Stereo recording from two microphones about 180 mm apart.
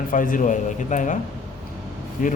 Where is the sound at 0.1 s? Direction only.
50° left (ahead or behind).